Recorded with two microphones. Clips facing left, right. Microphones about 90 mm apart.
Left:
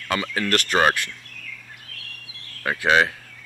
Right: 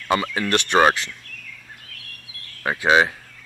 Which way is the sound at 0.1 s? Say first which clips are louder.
Right 3 dB; 20° right (ahead or behind).